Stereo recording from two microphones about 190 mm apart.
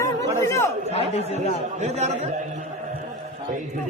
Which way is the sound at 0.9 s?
35° left (ahead or behind).